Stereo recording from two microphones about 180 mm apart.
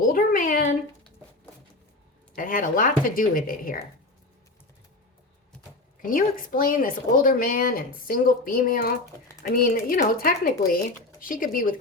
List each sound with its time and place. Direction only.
0.1 s a sound: 50° left (ahead or behind)
2.3 s a woman's voice: 50° left (ahead or behind)
6.0 s a woman's voice: 50° left (ahead or behind)